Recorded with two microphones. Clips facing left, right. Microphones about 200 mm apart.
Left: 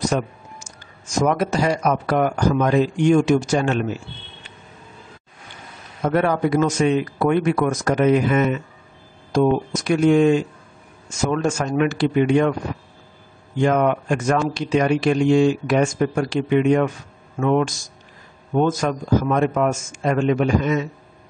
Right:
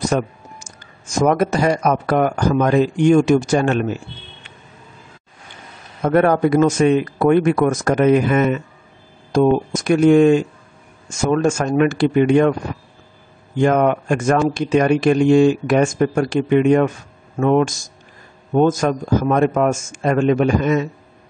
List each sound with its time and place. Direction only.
0.1 s speech: 55° right (ahead or behind)
6.0 s speech: 50° right (ahead or behind)
13.6 s speech: 50° right (ahead or behind)